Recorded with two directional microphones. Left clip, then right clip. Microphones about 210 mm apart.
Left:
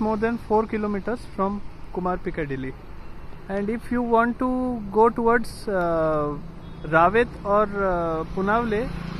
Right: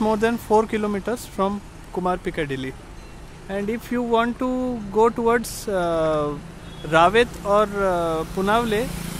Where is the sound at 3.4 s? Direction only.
10° right (ahead or behind).